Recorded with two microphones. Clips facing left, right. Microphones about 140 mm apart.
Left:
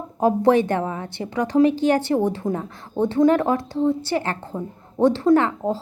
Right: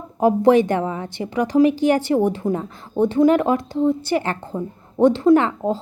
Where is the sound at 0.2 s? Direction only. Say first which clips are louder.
Right 3 dB; 10° right (ahead or behind).